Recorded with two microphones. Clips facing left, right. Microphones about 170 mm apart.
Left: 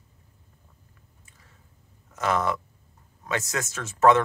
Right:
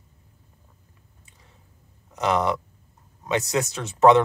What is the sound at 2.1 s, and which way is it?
Speech, 15° right (ahead or behind).